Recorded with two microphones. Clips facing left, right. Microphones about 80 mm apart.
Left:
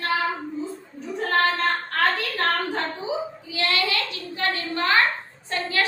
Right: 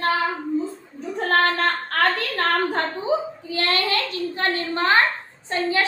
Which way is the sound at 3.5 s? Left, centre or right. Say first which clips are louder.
Right 2 dB; right.